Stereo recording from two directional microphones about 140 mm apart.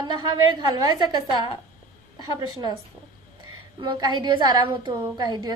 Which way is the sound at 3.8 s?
35° right (ahead or behind).